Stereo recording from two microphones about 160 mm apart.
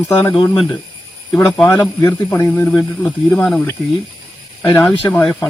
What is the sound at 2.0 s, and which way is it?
Speech, 15° left (ahead or behind).